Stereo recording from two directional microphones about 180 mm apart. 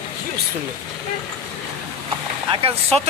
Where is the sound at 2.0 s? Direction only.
30° right (ahead or behind).